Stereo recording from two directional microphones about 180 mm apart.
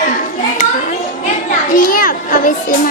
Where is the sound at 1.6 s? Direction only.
50° left (ahead or behind).